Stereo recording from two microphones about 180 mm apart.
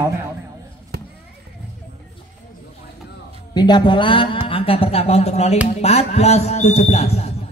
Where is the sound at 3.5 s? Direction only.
25° left (ahead or behind).